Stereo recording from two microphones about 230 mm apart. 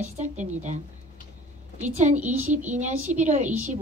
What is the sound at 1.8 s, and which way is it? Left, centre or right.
A woman's voice, right.